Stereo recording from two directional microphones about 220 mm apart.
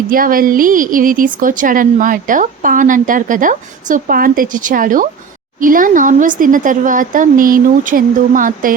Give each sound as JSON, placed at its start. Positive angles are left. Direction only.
{"t": 0.1, "sound": "a woman's voice", "side_deg": -40}